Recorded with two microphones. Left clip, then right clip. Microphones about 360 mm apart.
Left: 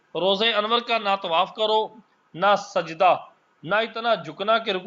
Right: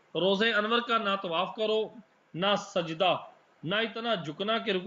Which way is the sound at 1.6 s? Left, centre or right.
Left.